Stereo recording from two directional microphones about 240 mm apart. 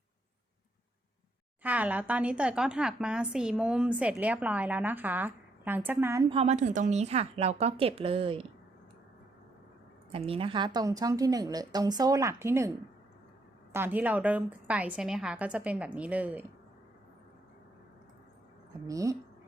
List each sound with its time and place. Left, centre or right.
1.6 s a woman's voice: centre; by 8.4 s right
10.1 s a woman's voice: right
13.7 s a woman's voice: centre
18.9 s a woman's voice: centre